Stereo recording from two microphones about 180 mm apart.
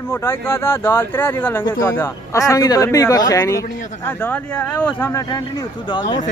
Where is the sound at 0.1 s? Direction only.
15° left (ahead or behind).